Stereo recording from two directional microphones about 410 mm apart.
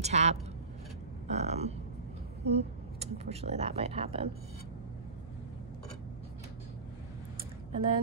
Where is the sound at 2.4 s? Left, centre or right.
Centre.